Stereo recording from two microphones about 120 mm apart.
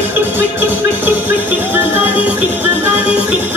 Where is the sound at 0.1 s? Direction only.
15° right (ahead or behind).